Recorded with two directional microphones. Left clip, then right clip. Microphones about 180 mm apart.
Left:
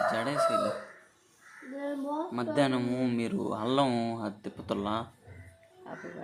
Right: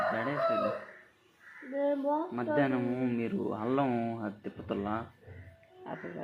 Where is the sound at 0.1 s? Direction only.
35° left (ahead or behind).